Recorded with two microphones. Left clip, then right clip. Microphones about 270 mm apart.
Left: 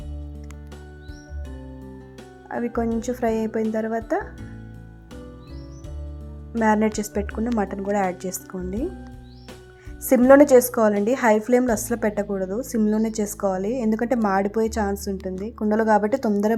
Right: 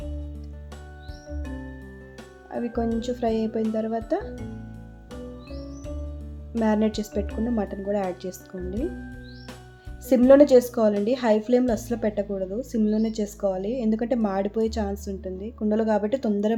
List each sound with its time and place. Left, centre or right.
2.5 s speech: centre
6.5 s speech: centre
10.1 s a woman's voice: centre
16.0 s speech: centre